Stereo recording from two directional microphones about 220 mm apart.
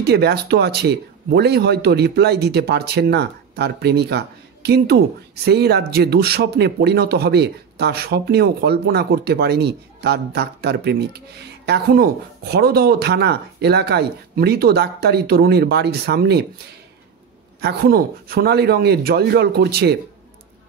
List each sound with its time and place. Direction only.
0.0 s speech: 45° right (ahead or behind)
17.6 s speech: 45° right (ahead or behind)